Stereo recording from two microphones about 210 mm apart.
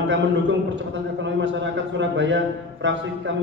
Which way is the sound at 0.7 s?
60° right (ahead or behind).